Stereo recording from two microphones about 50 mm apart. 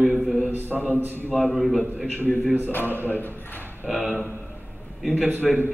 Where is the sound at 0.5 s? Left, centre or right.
Right.